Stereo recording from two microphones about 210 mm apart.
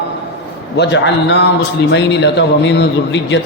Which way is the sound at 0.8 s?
55° left (ahead or behind).